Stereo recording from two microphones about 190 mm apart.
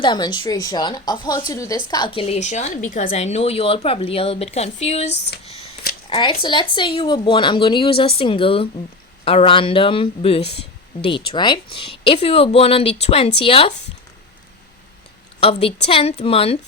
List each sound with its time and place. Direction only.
0.0 s speech: 25° left (ahead or behind)
15.4 s speech: 30° left (ahead or behind)